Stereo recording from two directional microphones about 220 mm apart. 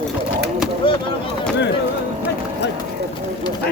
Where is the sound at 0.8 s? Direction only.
25° left (ahead or behind).